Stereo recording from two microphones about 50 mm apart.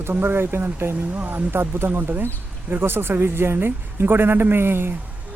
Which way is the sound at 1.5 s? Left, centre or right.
Right.